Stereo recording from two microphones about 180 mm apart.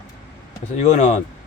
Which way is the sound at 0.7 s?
40° left (ahead or behind).